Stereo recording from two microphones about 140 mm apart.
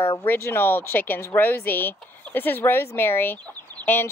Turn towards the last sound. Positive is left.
turn(degrees=15)  # may be behind; listen again after turning